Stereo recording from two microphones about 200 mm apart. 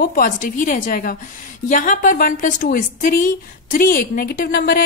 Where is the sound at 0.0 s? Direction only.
45° left (ahead or behind).